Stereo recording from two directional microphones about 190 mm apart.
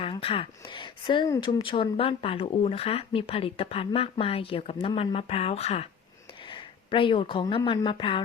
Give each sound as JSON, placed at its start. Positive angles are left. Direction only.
{"t": 0.0, "sound": "speech", "side_deg": 30}